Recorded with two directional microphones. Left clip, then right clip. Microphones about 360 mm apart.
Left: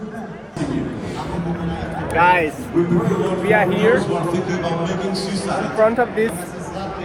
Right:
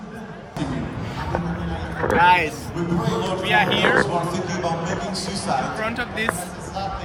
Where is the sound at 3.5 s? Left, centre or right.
Centre.